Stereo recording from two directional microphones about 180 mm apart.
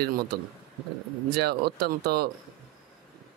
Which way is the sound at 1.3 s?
60° right (ahead or behind).